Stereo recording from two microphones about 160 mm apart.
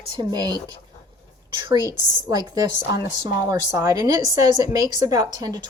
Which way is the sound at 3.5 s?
20° right (ahead or behind).